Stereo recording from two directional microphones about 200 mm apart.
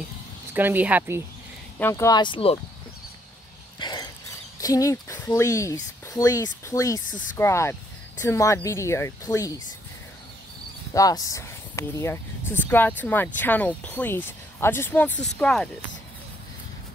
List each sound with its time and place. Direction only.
0.6 s speech: 10° right (ahead or behind)
1.8 s speech: 15° left (ahead or behind)
3.8 s a sound: 20° left (ahead or behind)
4.6 s speech: 15° left (ahead or behind)
10.9 s speech: 15° left (ahead or behind)